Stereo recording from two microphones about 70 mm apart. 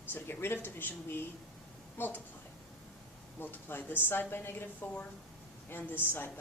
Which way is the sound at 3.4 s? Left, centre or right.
Left.